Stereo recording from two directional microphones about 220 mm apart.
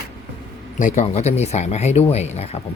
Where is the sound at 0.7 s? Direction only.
35° left (ahead or behind).